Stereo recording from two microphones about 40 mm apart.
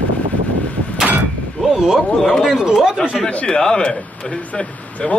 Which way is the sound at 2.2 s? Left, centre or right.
Centre.